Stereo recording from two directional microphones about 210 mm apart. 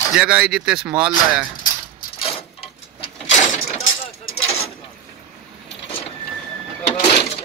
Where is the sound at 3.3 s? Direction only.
35° left (ahead or behind).